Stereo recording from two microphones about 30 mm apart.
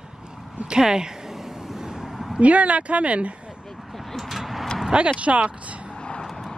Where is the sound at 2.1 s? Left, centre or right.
Centre.